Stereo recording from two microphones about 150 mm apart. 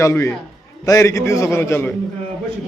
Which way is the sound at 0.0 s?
20° left (ahead or behind).